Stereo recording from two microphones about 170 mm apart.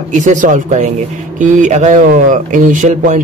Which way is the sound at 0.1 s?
45° right (ahead or behind).